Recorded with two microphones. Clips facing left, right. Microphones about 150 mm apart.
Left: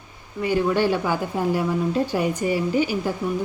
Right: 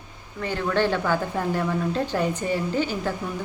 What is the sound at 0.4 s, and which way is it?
A woman's voice, 10° left (ahead or behind).